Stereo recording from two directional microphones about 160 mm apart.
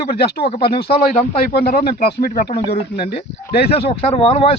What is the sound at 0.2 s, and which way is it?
Speech, 85° left.